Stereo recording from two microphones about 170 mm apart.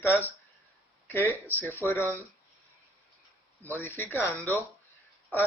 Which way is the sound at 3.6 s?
10° left (ahead or behind).